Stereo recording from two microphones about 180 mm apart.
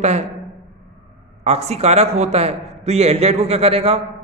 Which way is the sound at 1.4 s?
35° right (ahead or behind).